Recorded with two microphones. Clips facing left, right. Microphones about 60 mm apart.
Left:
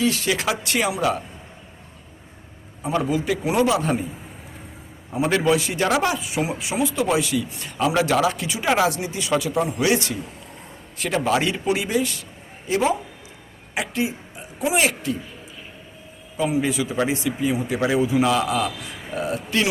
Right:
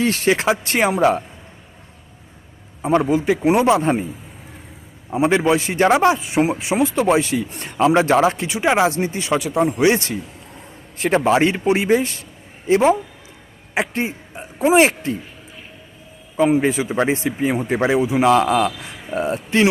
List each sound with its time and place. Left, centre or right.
0.0 s a man's voice: right
2.8 s a man's voice: right
5.1 s a man's voice: right
16.4 s a man's voice: right